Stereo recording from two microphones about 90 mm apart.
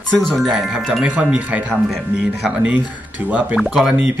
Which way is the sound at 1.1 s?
15° right (ahead or behind).